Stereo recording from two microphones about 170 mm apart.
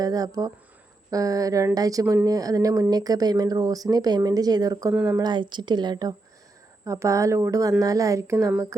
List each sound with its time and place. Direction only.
0.0 s a woman's voice: 20° right (ahead or behind)